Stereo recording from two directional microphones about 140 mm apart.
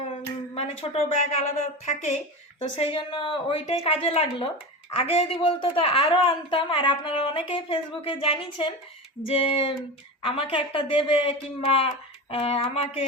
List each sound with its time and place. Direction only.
0.5 s a woman's voice: 50° left (ahead or behind)